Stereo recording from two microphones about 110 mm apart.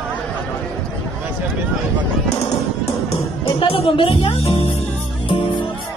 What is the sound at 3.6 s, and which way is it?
Speech, 60° left (ahead or behind).